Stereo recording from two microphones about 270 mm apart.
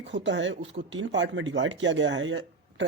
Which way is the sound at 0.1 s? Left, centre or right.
Right.